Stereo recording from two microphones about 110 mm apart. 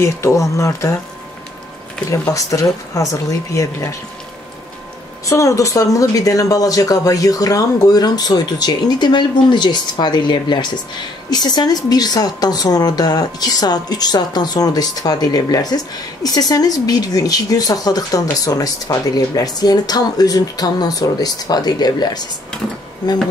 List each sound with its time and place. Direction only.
0.0 s speech: 25° left (ahead or behind)
2.0 s speech: 30° left (ahead or behind)
5.2 s a woman's voice: 30° left (ahead or behind)